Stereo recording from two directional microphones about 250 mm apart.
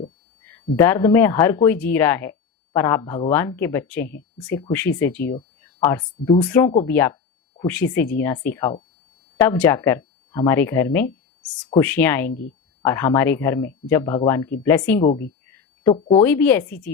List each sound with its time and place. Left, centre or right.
0.4 s speech: centre
6.4 s speech: centre
12.3 s speech: left
12.8 s speech: centre
15.4 s a sound: centre
16.0 s speech: centre